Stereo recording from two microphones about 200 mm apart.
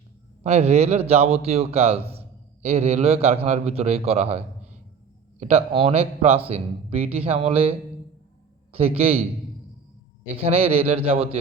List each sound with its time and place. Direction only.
0.4 s a man's voice: 30° right (ahead or behind)
9.0 s a man's voice: 30° right (ahead or behind)
10.3 s a man's voice: 30° right (ahead or behind)